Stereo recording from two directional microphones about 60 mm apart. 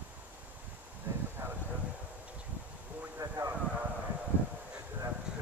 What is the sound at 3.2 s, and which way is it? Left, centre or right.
Vehicle, right.